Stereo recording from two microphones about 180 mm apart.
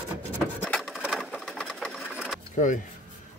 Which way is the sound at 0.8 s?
Centre (ahead or behind).